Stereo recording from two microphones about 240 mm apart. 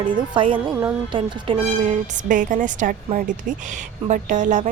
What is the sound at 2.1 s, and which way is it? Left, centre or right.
A woman's voice, right.